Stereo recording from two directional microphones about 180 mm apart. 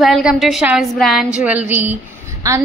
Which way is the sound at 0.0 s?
Centre (ahead or behind).